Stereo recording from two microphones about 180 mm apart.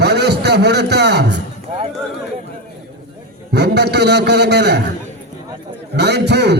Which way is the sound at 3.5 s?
70° right (ahead or behind).